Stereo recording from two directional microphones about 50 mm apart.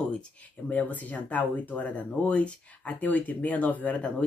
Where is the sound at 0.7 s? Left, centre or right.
Left.